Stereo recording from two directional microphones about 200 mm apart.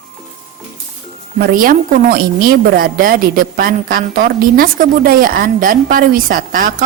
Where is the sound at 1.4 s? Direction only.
45° right (ahead or behind).